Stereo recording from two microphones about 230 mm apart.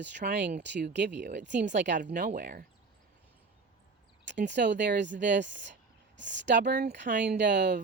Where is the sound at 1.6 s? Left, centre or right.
Right.